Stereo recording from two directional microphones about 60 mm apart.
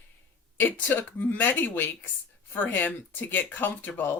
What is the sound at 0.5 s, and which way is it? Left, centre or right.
Speech, left.